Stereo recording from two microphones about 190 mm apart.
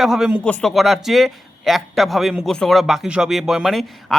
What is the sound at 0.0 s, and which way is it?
A man's voice, centre (ahead or behind).